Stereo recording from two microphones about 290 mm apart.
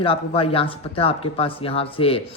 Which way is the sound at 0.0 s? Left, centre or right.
Centre.